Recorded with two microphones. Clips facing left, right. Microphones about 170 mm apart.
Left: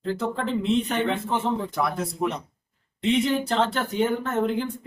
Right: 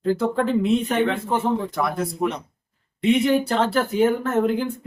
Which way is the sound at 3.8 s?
5° right (ahead or behind).